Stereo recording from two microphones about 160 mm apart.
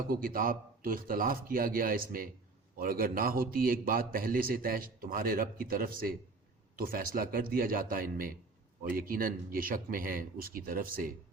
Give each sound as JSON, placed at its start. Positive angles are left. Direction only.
{"t": 0.1, "sound": "a man's voice", "side_deg": -65}